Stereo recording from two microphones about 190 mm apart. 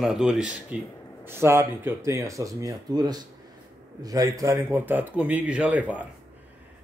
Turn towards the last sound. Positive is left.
turn(degrees=-5)  # may be behind; listen again after turning